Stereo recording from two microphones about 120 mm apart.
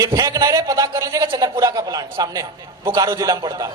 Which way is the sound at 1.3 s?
40° right (ahead or behind).